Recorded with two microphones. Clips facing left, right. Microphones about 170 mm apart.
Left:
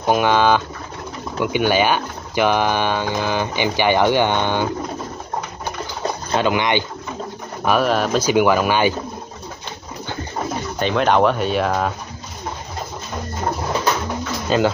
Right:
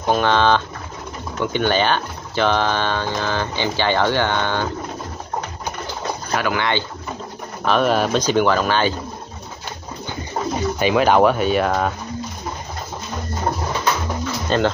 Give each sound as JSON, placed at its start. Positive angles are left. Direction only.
{"t": 0.0, "sound": "speech", "side_deg": 10}
{"t": 6.3, "sound": "speech", "side_deg": 20}
{"t": 7.6, "sound": "speech", "side_deg": 5}
{"t": 10.8, "sound": "speech", "side_deg": -5}
{"t": 14.5, "sound": "speech", "side_deg": 5}